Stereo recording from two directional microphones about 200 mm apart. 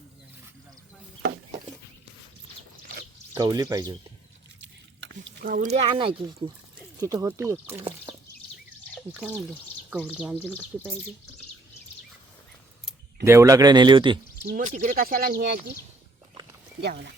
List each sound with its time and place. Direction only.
3.3 s speech: 20° right (ahead or behind)
4.6 s drip: 65° right (ahead or behind)
5.5 s speech: 40° right (ahead or behind); by 7.9 s 10° right (ahead or behind)
9.1 s speech: 5° right (ahead or behind)
13.2 s speech: 15° right (ahead or behind)
14.4 s speech: 40° right (ahead or behind)
16.8 s speech: 55° right (ahead or behind)